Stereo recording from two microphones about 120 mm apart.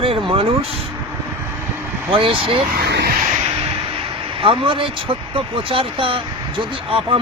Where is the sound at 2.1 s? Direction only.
45° right (ahead or behind).